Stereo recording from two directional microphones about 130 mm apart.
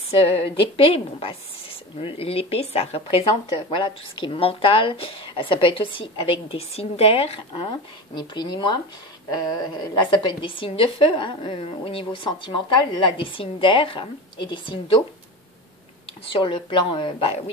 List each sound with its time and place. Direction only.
0.1 s a woman's voice: 45° left (ahead or behind)
16.3 s a woman's voice: 40° left (ahead or behind)